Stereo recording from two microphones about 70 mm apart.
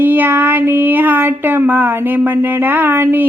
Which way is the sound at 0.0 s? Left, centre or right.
Right.